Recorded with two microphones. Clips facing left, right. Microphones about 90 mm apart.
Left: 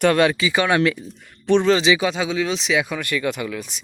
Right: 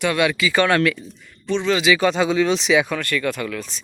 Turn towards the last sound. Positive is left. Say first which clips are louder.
# even
turn(degrees=10)  # may be behind; listen again after turning